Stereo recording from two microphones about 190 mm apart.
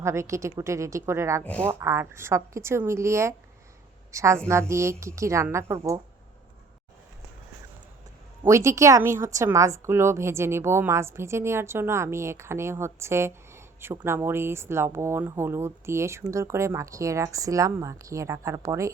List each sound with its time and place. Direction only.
0.0 s a woman's voice: 15° right (ahead or behind)
8.4 s a woman's voice: 15° right (ahead or behind)